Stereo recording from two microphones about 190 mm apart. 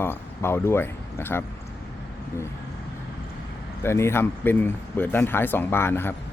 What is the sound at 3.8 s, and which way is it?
Speech, 15° left (ahead or behind).